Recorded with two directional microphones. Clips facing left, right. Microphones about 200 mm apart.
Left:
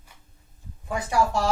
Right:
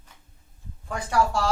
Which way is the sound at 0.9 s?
10° left (ahead or behind).